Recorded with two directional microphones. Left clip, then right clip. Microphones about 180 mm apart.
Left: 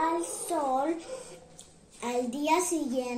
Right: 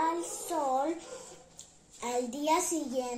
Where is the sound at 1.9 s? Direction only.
10° right (ahead or behind).